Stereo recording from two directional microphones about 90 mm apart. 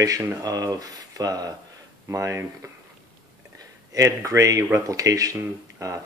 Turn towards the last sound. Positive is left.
turn(degrees=-35)  # may be behind; listen again after turning